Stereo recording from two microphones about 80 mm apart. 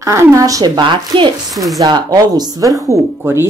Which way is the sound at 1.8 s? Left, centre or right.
Right.